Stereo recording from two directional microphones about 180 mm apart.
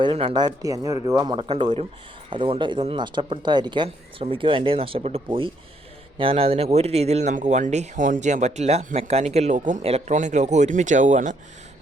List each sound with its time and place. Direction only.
0.0 s speech: 30° right (ahead or behind)